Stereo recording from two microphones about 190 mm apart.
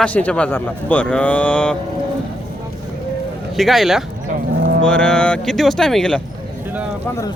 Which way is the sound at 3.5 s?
Centre (ahead or behind).